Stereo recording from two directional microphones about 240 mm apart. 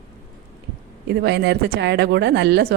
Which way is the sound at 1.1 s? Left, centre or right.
Right.